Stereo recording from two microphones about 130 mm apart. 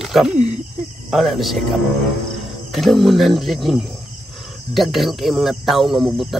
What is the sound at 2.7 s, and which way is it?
Speech, centre (ahead or behind).